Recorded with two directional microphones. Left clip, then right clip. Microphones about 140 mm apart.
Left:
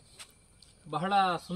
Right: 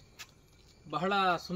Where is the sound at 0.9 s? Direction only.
Centre (ahead or behind).